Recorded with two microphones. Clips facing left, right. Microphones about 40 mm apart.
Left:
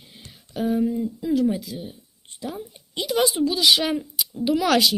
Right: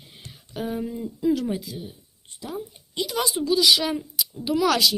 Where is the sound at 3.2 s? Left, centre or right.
Left.